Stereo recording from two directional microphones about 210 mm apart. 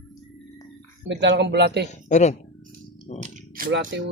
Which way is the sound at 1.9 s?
35° left (ahead or behind).